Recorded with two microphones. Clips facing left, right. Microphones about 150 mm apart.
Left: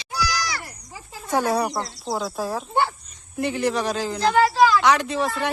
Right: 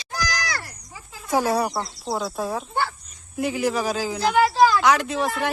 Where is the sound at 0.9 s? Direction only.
35° left (ahead or behind).